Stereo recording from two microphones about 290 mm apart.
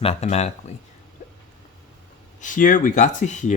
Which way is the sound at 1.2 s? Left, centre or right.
Left.